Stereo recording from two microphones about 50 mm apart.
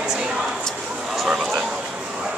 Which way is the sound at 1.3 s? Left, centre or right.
Centre.